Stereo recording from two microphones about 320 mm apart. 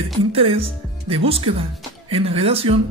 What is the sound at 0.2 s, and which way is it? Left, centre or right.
Speech, centre.